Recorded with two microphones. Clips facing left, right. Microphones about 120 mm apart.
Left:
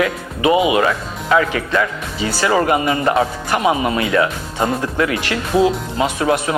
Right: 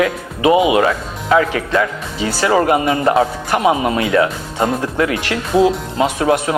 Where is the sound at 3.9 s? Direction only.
35° right (ahead or behind).